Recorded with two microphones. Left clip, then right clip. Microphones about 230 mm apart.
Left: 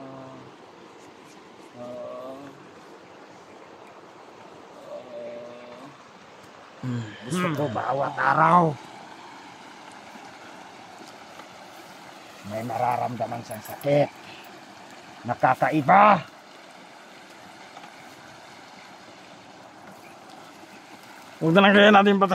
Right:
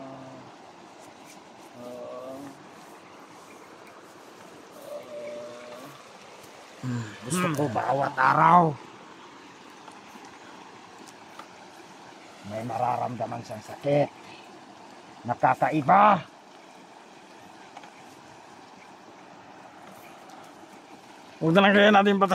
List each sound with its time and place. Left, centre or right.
7.3 s speech: centre
7.7 s speech: right
8.4 s speech: centre
12.5 s speech: centre
15.2 s speech: centre
21.4 s speech: centre